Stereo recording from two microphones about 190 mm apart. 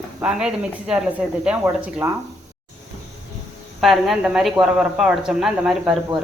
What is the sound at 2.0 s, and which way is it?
Speech, 15° right (ahead or behind).